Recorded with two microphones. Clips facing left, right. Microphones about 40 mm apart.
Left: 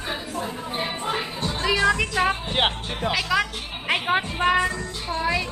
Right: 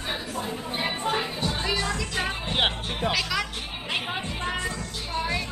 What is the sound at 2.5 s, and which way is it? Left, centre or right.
Music, centre.